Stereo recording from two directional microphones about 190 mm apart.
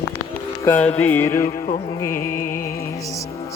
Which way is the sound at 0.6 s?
10° left (ahead or behind).